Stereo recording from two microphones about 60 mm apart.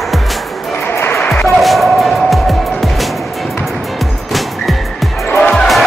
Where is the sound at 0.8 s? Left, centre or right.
Left.